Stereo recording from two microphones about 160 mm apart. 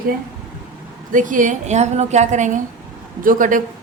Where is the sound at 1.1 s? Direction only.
55° right (ahead or behind).